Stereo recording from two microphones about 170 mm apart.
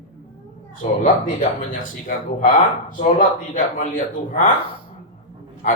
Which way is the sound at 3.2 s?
50° left (ahead or behind).